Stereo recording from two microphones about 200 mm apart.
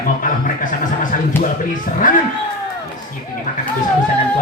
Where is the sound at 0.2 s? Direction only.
40° left (ahead or behind).